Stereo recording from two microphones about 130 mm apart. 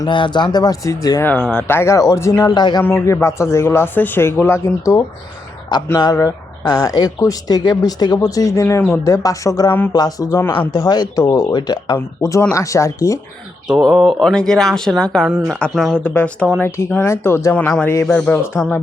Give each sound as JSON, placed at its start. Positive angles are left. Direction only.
{"t": 0.0, "sound": "speech", "side_deg": 35}
{"t": 1.2, "sound": "speech", "side_deg": 10}
{"t": 2.6, "sound": "speech", "side_deg": 35}
{"t": 2.8, "sound": "speech", "side_deg": 15}
{"t": 11.9, "sound": "speech", "side_deg": 20}
{"t": 13.7, "sound": "speech", "side_deg": -5}